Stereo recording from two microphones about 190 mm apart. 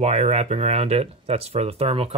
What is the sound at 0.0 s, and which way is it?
Speech, 35° right (ahead or behind).